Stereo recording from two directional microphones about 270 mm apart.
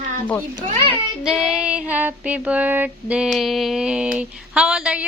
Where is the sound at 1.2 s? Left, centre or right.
Centre.